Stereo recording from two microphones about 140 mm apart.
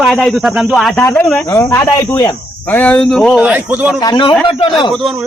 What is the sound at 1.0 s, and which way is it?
Speech, 15° left (ahead or behind).